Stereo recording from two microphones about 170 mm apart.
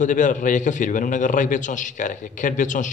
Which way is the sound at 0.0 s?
50° left (ahead or behind).